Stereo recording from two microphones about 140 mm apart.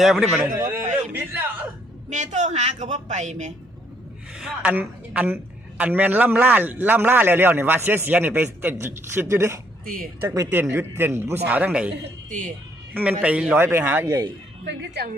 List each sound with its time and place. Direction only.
0.0 s a man's voice: 5° right (ahead or behind)
0.3 s a man's voice: 20° right (ahead or behind)
2.0 s a man's voice: 60° right (ahead or behind)
4.4 s a man's voice: 5° right (ahead or behind)
9.8 s speech: 80° right
10.2 s a man's voice: 20° right (ahead or behind)
12.3 s a man's voice: 60° right (ahead or behind)
12.9 s a man's voice: 10° right (ahead or behind)